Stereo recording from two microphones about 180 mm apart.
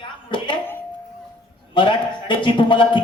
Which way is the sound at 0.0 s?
25° left (ahead or behind).